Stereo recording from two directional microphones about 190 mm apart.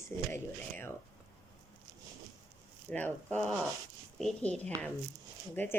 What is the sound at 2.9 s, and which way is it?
A woman's voice, 10° left (ahead or behind).